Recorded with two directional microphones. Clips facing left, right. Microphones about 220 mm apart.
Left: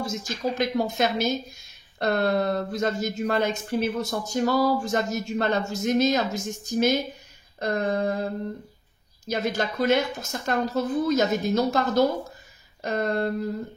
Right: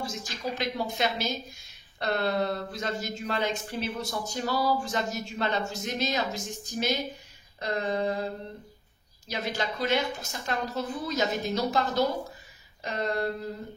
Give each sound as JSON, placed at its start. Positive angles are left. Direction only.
{"t": 0.0, "sound": "speech", "side_deg": 45}
{"t": 7.5, "sound": "a sound", "side_deg": 50}
{"t": 9.3, "sound": "speech", "side_deg": 45}